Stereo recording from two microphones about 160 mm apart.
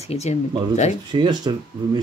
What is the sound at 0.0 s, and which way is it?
Speech, 40° left (ahead or behind).